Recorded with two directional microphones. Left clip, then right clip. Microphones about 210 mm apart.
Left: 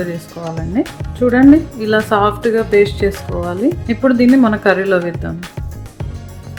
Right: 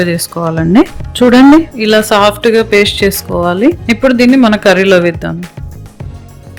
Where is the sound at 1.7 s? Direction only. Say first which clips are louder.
Right 6 dB; 40° right (ahead or behind).